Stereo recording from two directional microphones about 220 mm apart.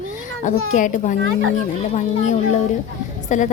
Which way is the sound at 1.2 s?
65° right (ahead or behind).